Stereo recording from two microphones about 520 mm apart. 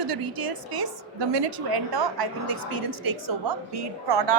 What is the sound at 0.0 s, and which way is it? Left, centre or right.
A woman's voice, right.